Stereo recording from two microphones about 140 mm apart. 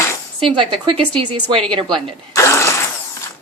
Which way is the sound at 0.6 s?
40° right (ahead or behind).